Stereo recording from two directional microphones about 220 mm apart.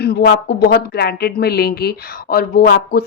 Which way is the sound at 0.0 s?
50° left (ahead or behind).